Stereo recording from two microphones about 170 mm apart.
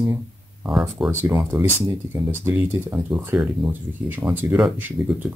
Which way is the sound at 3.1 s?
10° right (ahead or behind).